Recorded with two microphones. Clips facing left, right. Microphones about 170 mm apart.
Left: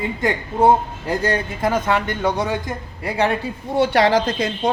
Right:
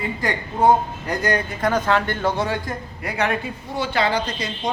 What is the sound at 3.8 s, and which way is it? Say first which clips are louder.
Speech: left 6 dB; 80° left.